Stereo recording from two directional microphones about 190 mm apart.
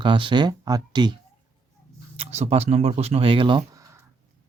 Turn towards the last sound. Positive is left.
turn(degrees=-25)  # may be behind; listen again after turning